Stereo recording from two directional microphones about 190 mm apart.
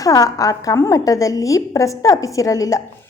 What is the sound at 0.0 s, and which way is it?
A woman's voice, 20° left (ahead or behind).